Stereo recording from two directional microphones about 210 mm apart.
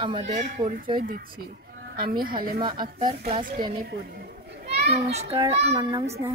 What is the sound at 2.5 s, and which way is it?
A woman's voice, 20° right (ahead or behind).